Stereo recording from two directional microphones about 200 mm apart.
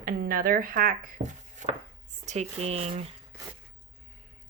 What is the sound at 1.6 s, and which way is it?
Chopping, 40° right (ahead or behind).